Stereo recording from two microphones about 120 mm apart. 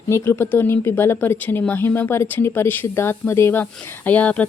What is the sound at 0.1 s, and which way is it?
Speech, 20° left (ahead or behind).